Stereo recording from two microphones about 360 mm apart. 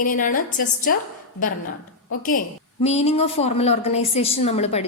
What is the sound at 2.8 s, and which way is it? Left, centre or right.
A woman's voice, centre.